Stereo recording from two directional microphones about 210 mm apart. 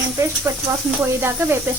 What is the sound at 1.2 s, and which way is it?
Speech, 10° right (ahead or behind).